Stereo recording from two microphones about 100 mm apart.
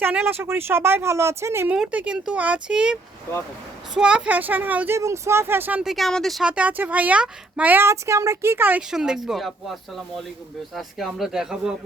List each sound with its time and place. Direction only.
0.0 s speech: 20° right (ahead or behind)
1.7 s speech: 10° right (ahead or behind)
4.9 s speech: 30° right (ahead or behind)
5.8 s speech: centre (ahead or behind)
6.4 s speech: 10° right (ahead or behind)
8.9 s speech: 5° right (ahead or behind)
10.8 s speech: centre (ahead or behind)